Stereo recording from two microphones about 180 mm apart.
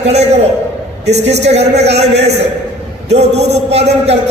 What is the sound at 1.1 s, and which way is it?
A man's voice, 35° right (ahead or behind).